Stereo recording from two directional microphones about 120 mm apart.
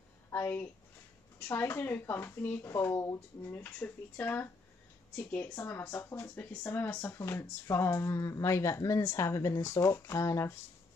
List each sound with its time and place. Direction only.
0.3 s a woman's voice: 20° left (ahead or behind)